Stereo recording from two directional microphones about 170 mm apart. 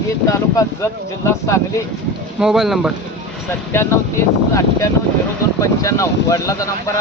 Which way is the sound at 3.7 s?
15° left (ahead or behind).